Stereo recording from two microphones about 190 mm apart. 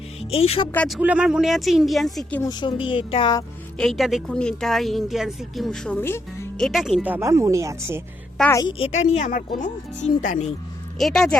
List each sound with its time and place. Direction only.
0.2 s speech: 30° left (ahead or behind)
0.7 s a woman's voice: 10° left (ahead or behind)
0.9 s speech: 5° right (ahead or behind)
2.4 s speech: 20° left (ahead or behind)
3.8 s speech: centre (ahead or behind)
6.6 s speech: centre (ahead or behind)
8.4 s a woman's voice: 10° left (ahead or behind)
8.6 s a woman's voice: 30° left (ahead or behind)
10.9 s speech: centre (ahead or behind)